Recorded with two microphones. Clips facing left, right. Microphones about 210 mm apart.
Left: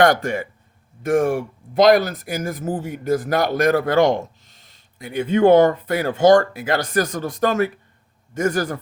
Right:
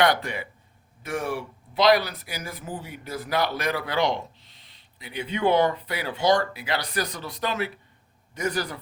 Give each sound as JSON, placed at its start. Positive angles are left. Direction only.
{"t": 0.0, "sound": "speech", "side_deg": 45}